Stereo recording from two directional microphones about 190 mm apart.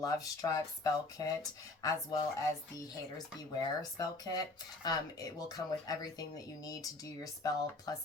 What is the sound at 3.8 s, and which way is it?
Speech, 20° left (ahead or behind).